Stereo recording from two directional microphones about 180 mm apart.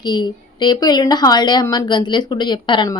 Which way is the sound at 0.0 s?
25° left (ahead or behind).